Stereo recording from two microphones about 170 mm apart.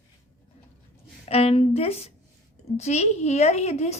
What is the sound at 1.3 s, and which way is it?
A woman's voice, 35° left (ahead or behind).